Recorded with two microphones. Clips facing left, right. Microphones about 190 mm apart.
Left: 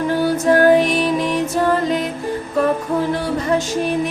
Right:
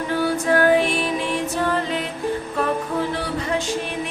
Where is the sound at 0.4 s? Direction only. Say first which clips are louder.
Left 5 dB; 40° left (ahead or behind).